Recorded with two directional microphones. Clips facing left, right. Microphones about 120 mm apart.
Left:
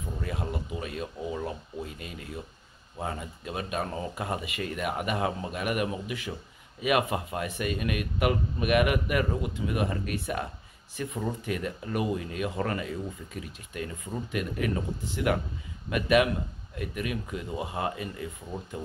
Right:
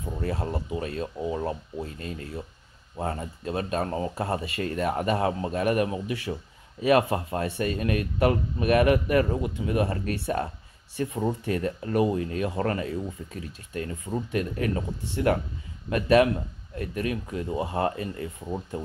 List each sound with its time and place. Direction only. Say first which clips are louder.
0.2 s speech: right 5 dB; 35° right (ahead or behind)